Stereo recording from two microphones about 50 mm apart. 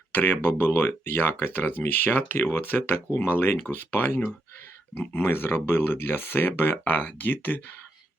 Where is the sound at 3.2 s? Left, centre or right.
Left.